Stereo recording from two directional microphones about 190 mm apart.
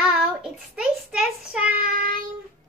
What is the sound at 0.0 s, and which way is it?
Child singing, 5° right (ahead or behind).